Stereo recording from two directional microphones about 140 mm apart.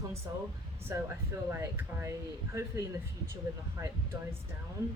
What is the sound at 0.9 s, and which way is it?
A woman's voice, 20° right (ahead or behind).